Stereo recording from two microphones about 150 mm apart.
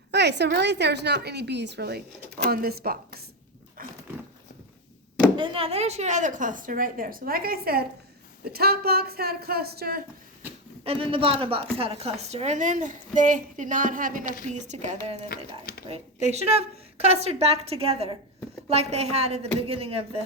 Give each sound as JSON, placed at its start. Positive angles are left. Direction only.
{"t": 0.4, "sound": "speech", "side_deg": -90}
{"t": 3.8, "sound": "dog", "side_deg": -70}
{"t": 5.4, "sound": "a woman's voice", "side_deg": -40}
{"t": 10.8, "sound": "a woman's voice", "side_deg": -40}
{"t": 14.4, "sound": "a woman's voice", "side_deg": -50}